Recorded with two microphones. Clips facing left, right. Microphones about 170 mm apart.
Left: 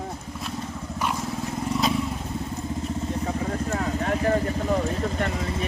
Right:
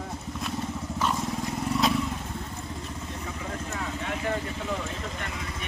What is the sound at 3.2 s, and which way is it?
Vehicle, 40° left (ahead or behind).